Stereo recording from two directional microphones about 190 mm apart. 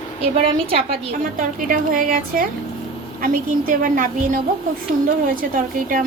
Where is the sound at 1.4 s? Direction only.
45° right (ahead or behind).